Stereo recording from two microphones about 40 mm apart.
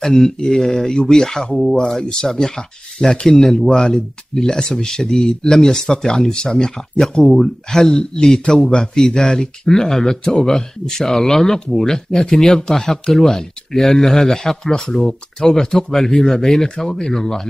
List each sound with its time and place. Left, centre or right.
0.0 s a man's voice: centre
7.0 s a man's voice: centre